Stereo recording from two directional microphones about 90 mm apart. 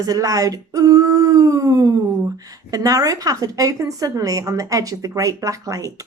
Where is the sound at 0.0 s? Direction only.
40° right (ahead or behind).